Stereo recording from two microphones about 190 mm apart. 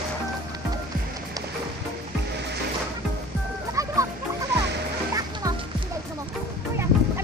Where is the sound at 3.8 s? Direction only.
15° right (ahead or behind).